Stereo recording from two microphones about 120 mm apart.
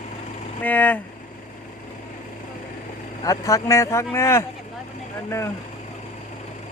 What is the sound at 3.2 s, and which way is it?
Speech, 25° left (ahead or behind).